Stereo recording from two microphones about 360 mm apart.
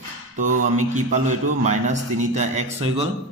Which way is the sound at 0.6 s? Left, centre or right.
Right.